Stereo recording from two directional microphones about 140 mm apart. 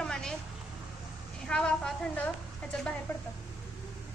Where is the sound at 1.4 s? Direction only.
5° left (ahead or behind).